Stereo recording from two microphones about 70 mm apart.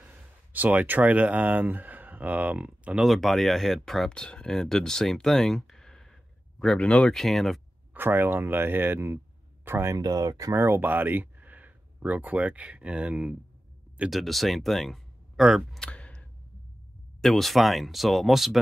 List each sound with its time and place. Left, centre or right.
0.0 s speech: right
3.0 s speech: centre
7.2 s speech: centre
7.9 s speech: right
9.8 s speech: right
10.5 s speech: right
10.8 s speech: right
14.1 s speech: centre
15.8 s clicking: centre
17.2 s speech: centre